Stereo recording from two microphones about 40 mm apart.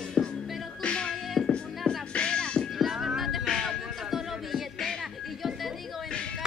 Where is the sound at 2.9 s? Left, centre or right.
Centre.